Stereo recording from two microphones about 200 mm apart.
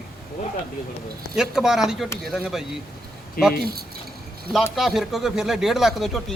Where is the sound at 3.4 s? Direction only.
50° left (ahead or behind).